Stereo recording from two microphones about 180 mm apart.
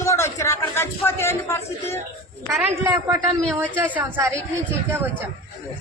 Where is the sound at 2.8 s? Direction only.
10° right (ahead or behind).